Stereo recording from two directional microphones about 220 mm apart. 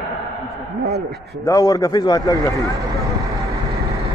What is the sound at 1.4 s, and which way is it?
Speech, 15° left (ahead or behind).